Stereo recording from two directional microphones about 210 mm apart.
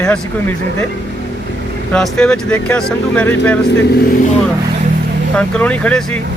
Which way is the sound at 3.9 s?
50° left (ahead or behind).